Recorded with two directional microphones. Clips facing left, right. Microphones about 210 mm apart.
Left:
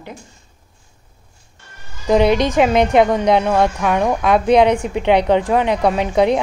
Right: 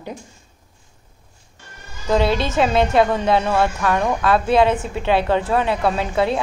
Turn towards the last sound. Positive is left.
turn(degrees=20)  # may be behind; listen again after turning